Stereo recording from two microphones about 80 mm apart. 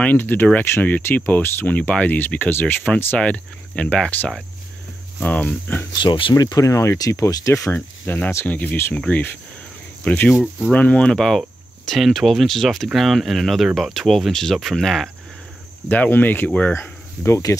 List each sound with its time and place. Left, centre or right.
0.0 s speech: left
6.0 s speech: left
6.3 s speech: left
7.7 s speech: left; by 15.0 s centre
15.9 s speech: left
16.7 s a sound: left